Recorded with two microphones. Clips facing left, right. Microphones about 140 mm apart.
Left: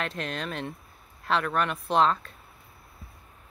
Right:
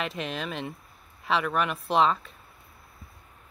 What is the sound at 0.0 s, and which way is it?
Speech, centre (ahead or behind).